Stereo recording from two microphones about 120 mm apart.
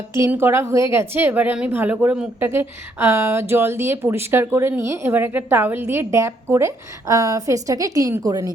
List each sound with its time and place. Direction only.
0.3 s speech: 20° right (ahead or behind)